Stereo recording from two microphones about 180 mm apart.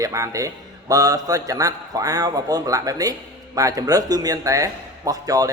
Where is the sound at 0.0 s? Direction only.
15° right (ahead or behind).